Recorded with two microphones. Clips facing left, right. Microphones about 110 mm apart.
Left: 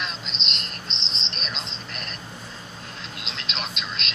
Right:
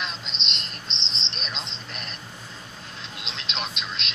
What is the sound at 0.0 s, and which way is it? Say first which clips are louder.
Cricket: left 1 dB; 25° right (ahead or behind).